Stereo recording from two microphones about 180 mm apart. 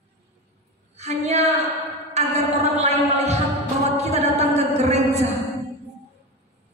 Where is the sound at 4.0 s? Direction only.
40° right (ahead or behind).